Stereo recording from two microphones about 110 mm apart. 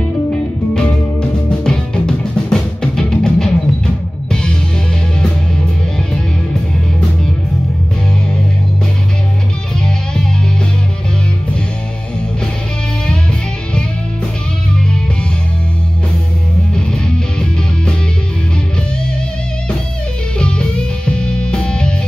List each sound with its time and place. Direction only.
1.6 s music: 5° left (ahead or behind)
16.7 s music: 5° left (ahead or behind)
20.3 s music: 10° left (ahead or behind)